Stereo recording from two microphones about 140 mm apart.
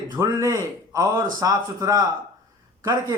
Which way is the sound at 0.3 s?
20° right (ahead or behind).